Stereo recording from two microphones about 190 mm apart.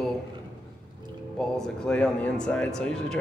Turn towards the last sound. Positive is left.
turn(degrees=5)  # may be behind; listen again after turning